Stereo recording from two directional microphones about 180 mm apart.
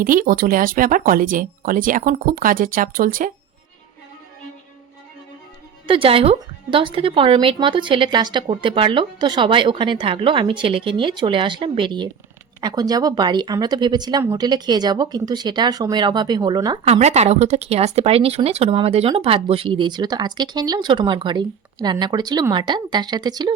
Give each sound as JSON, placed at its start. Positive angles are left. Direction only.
{"t": 0.0, "sound": "speech", "side_deg": -50}
{"t": 5.9, "sound": "speech", "side_deg": -30}
{"t": 16.8, "sound": "speech", "side_deg": -35}